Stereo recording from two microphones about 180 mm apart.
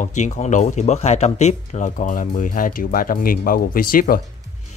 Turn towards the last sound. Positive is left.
turn(degrees=50)  # may be behind; listen again after turning